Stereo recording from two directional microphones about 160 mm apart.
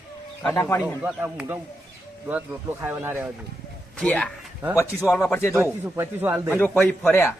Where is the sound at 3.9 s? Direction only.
5° left (ahead or behind).